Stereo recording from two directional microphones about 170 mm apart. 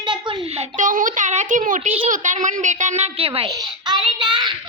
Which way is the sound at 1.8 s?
35° right (ahead or behind).